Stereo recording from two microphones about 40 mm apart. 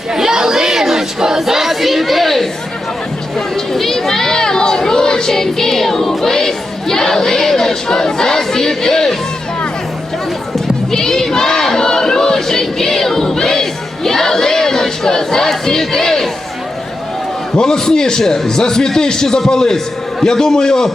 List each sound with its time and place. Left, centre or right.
0.1 s crowd: centre
10.5 s crowd: centre
17.5 s a man's voice: centre